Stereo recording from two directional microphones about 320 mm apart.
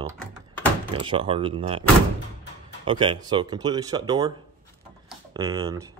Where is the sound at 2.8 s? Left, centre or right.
Centre.